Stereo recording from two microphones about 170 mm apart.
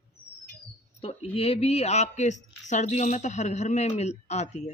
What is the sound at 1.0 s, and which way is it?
A woman's voice, 35° left (ahead or behind).